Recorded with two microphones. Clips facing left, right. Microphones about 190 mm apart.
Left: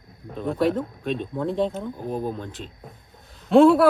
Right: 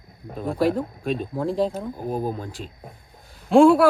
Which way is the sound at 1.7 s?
35° right (ahead or behind).